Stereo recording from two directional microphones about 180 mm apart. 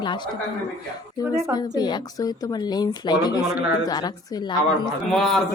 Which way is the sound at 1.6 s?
25° left (ahead or behind).